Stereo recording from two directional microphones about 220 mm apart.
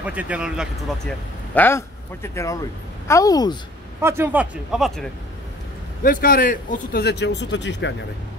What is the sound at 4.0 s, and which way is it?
A man's voice, 10° right (ahead or behind).